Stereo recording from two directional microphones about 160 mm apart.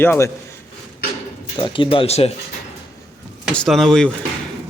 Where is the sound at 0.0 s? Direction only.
15° left (ahead or behind).